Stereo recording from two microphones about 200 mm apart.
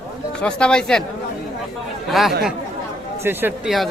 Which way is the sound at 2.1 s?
Centre (ahead or behind).